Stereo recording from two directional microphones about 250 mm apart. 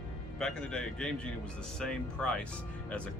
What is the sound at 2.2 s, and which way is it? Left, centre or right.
Speech, centre.